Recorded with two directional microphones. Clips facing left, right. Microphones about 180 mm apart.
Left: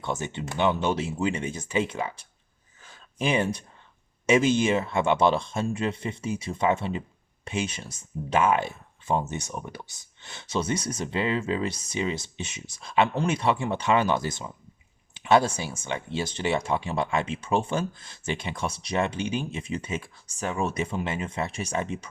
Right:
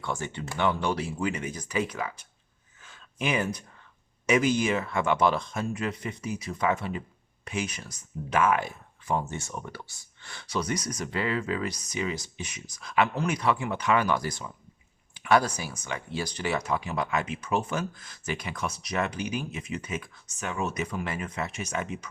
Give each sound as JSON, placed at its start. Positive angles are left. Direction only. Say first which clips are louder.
{"t": 0.0, "sound": "speech", "louder": "left 2 dB", "side_deg": 20}
{"t": 2.8, "sound": "a sound", "louder": "left 3 dB", "side_deg": 35}
{"t": 4.3, "sound": "speech", "louder": "left 3 dB", "side_deg": 25}